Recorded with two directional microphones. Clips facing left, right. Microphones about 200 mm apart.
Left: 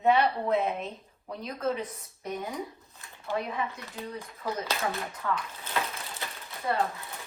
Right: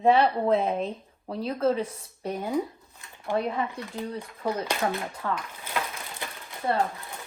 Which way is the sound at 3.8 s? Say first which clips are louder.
Right 5 dB; 30° right (ahead or behind).